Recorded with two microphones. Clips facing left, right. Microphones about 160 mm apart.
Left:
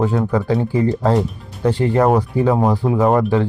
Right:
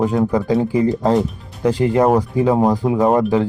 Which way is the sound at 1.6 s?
15° right (ahead or behind).